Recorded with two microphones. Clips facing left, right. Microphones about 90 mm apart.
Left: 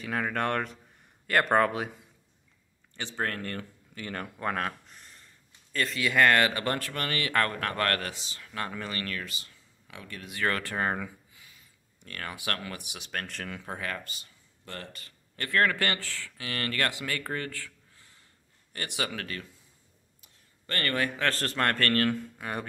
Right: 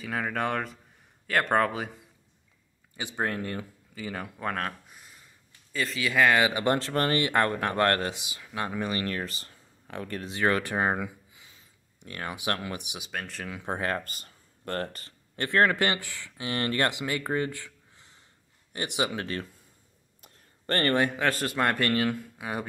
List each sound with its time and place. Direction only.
0.0 s a man's voice: centre (ahead or behind)
2.9 s a man's voice: 15° right (ahead or behind)
3.9 s speech: 5° right (ahead or behind); by 9.1 s 20° right (ahead or behind)
9.1 s speech: 40° right (ahead or behind)
10.2 s speech: 20° right (ahead or behind)
13.0 s a man's voice: 5° right (ahead or behind)
13.7 s speech: 35° right (ahead or behind)
15.3 s speech: 25° right (ahead or behind)
20.2 s a sound: 50° right (ahead or behind)
20.7 s speech: 30° right (ahead or behind)
21.2 s a man's voice: 15° right (ahead or behind)